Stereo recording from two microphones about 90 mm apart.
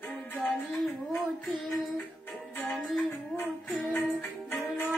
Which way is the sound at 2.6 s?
Centre (ahead or behind).